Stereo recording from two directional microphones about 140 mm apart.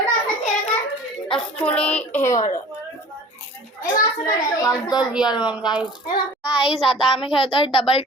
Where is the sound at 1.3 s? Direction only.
10° left (ahead or behind).